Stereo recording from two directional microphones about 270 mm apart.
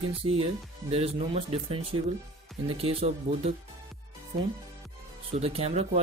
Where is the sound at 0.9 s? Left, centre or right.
Right.